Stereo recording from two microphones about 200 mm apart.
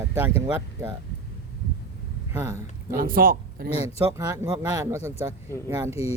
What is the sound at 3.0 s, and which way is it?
Speech, 45° right (ahead or behind).